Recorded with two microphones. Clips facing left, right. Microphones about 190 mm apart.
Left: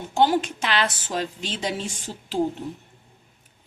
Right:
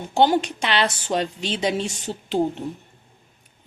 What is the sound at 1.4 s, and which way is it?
Speech, 70° right (ahead or behind).